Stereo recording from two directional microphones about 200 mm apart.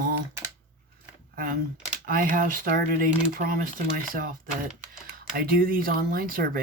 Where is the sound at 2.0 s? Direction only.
40° right (ahead or behind).